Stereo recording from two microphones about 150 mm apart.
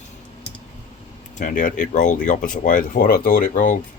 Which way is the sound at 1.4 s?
60° left (ahead or behind).